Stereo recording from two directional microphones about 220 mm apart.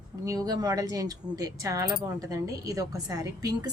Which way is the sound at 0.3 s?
15° right (ahead or behind).